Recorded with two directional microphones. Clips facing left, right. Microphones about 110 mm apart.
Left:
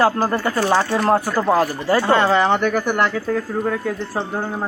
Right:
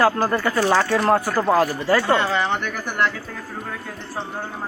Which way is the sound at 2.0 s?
45° left (ahead or behind).